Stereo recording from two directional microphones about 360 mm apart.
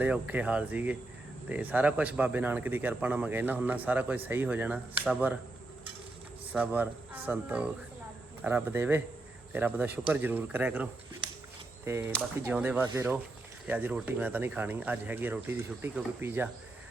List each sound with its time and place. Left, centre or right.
0.0 s speech: centre
6.5 s speech: centre
11.9 s speech: centre